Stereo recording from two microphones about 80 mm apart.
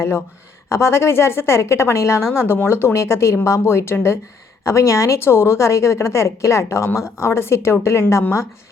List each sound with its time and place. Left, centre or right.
0.7 s a woman's voice: left